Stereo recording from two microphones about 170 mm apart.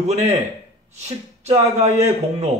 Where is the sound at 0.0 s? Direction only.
40° right (ahead or behind).